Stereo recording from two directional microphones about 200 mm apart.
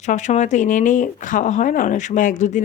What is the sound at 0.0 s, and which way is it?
Speech, 35° left (ahead or behind).